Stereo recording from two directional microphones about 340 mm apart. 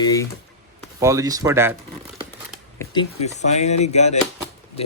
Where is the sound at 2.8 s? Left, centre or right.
Centre.